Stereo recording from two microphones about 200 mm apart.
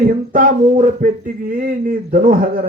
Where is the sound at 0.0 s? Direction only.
45° right (ahead or behind).